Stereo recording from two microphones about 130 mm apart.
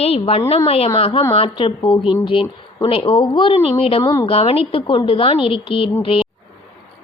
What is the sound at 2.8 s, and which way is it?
A woman's voice, 45° left (ahead or behind).